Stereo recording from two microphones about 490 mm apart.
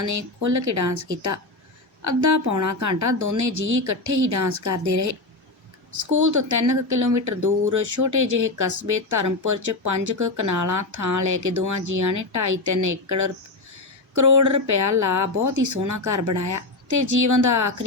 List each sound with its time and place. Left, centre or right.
0.0 s speech: right
6.1 s speech: right